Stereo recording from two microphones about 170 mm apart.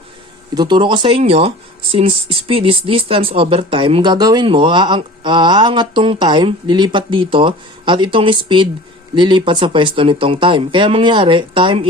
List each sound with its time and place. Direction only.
0.5 s speech: 25° right (ahead or behind)